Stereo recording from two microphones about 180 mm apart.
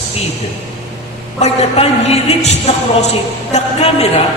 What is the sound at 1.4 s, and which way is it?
A man's voice, 35° left (ahead or behind).